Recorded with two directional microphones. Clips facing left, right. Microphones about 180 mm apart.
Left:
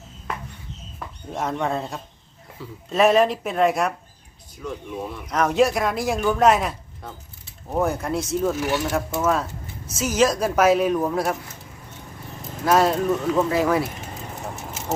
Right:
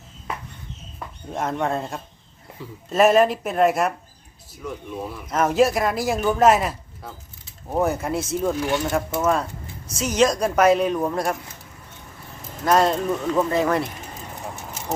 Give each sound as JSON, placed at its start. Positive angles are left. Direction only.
{"t": 0.9, "sound": "speech", "side_deg": 0}
{"t": 2.6, "sound": "speech", "side_deg": -15}
{"t": 2.9, "sound": "speech", "side_deg": 0}
{"t": 12.6, "sound": "speech", "side_deg": 5}